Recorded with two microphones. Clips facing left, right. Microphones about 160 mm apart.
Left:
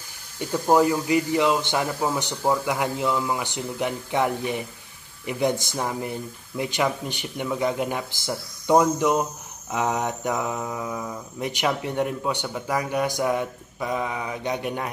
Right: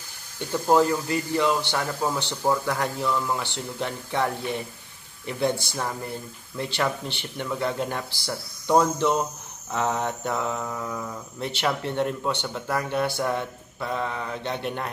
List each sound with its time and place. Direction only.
0.5 s speech: 10° left (ahead or behind)